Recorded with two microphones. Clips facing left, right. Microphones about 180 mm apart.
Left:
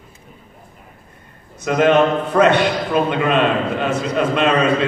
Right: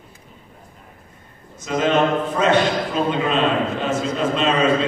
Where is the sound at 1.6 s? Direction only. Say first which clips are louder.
Left 4 dB; 60° left (ahead or behind).